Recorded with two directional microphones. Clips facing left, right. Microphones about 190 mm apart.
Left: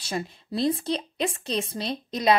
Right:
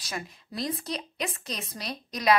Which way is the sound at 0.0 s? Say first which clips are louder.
Left 6 dB; 30° left (ahead or behind).